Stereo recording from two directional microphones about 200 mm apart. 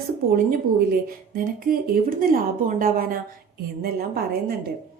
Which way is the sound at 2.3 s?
45° right (ahead or behind).